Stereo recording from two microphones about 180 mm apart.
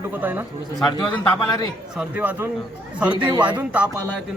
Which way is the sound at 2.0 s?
10° right (ahead or behind).